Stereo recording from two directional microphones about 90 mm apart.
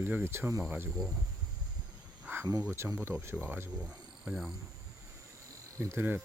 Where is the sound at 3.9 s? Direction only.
5° right (ahead or behind).